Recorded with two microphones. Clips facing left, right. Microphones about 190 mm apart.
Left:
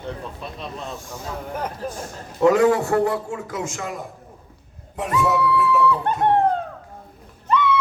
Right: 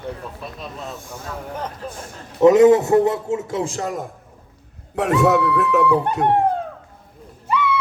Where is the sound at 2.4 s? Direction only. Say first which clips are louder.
Right 5 dB; 20° right (ahead or behind); by 4.0 s 40° right (ahead or behind).